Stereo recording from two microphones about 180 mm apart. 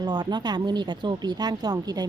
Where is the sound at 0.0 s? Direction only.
25° right (ahead or behind).